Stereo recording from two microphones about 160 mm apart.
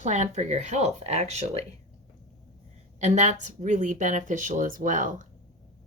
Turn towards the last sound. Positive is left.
turn(degrees=-55)  # may be behind; listen again after turning